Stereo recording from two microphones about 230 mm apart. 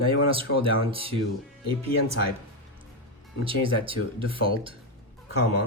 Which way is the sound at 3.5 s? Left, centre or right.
Right.